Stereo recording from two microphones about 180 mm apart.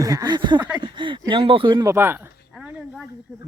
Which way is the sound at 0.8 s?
25° right (ahead or behind).